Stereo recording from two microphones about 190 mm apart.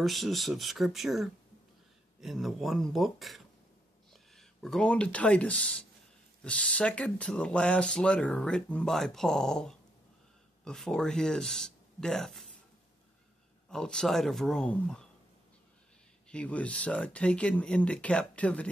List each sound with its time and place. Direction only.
0.0 s speech: centre (ahead or behind)
13.7 s speech: 5° left (ahead or behind)
16.3 s speech: 5° left (ahead or behind)